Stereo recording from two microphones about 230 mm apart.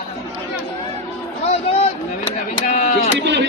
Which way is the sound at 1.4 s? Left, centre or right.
Left.